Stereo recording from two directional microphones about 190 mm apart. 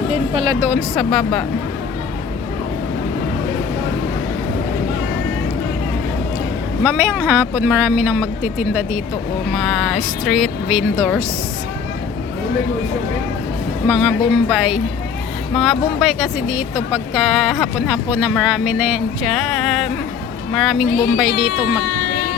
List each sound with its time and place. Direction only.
0.1 s speech: 25° right (ahead or behind)
0.6 s speech: 5° right (ahead or behind)
6.8 s speech: 10° right (ahead or behind)
13.8 s speech: 5° right (ahead or behind)